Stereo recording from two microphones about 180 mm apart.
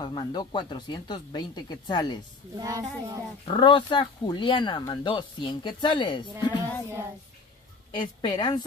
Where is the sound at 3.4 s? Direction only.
25° left (ahead or behind).